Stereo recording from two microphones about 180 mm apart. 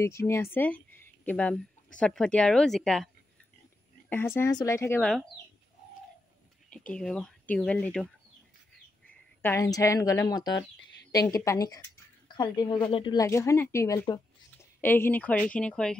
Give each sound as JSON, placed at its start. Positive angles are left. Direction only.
{"t": 0.0, "sound": "a woman's voice", "side_deg": 15}
{"t": 4.1, "sound": "speech", "side_deg": 10}
{"t": 6.9, "sound": "a woman's voice", "side_deg": 5}